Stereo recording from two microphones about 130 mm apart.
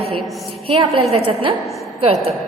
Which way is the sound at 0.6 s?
45° right (ahead or behind).